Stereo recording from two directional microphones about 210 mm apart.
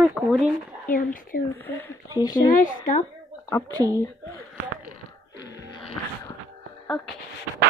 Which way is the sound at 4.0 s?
15° left (ahead or behind).